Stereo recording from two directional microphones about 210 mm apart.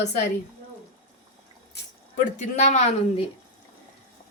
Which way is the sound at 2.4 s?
35° left (ahead or behind).